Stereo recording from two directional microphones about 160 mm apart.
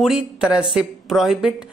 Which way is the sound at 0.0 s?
5° right (ahead or behind).